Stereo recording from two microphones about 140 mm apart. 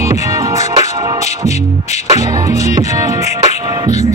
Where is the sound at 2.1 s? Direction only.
20° right (ahead or behind).